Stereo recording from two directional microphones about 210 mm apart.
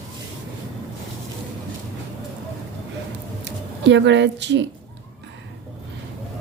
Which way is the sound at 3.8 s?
60° right (ahead or behind).